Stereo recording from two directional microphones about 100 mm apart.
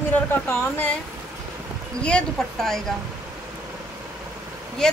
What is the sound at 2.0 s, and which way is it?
Speech, 10° left (ahead or behind).